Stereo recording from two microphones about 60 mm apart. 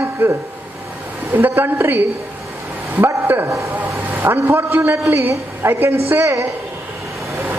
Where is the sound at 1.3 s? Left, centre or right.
Right.